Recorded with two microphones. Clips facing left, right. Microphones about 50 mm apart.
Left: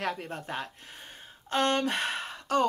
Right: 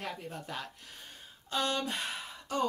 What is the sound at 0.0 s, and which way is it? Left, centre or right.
Speech, left.